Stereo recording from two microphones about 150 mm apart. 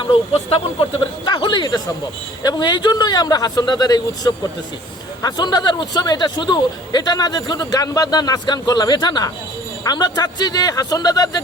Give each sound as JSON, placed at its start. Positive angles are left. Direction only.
{"t": 0.0, "sound": "a man's voice", "side_deg": 35}